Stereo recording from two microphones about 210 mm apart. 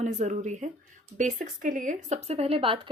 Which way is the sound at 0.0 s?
35° right (ahead or behind).